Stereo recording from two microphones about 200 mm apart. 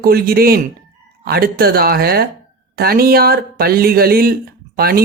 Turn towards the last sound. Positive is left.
turn(degrees=-50)  # may be behind; listen again after turning